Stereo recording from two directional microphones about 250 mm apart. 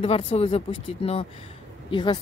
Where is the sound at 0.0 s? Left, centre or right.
Left.